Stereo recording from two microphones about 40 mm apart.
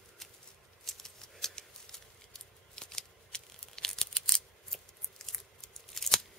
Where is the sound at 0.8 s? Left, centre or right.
Centre.